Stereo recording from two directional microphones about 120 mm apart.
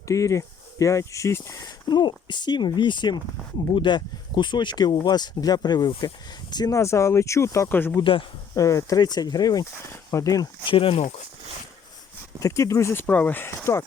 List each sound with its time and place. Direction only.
0.1 s speech: 25° left (ahead or behind)
8.5 s speech: 30° left (ahead or behind)
10.7 s speech: 50° left (ahead or behind)
12.4 s speech: 25° left (ahead or behind)